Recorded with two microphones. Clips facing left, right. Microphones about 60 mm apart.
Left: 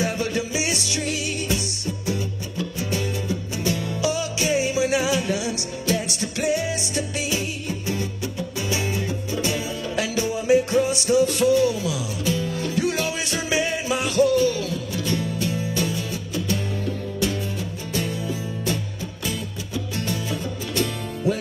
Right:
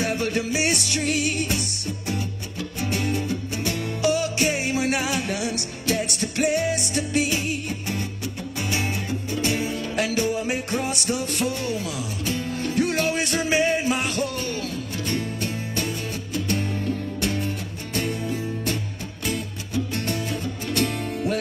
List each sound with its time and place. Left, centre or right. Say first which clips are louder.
0.0 s music: even; right
2.8 s music: right 3 dB; right